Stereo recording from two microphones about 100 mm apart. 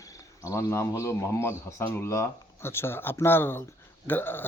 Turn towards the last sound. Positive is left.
turn(degrees=20)  # may be behind; listen again after turning